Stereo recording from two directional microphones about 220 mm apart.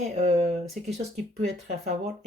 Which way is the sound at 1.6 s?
35° right (ahead or behind).